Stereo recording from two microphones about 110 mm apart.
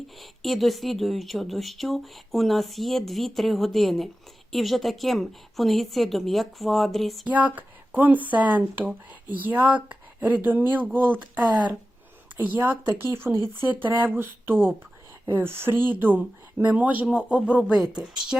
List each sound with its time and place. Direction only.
0.2 s speech: centre (ahead or behind)
7.3 s speech: 15° right (ahead or behind)
12.9 s a sound: 20° right (ahead or behind)
15.3 s speech: 20° right (ahead or behind); by 18.3 s 5° right (ahead or behind)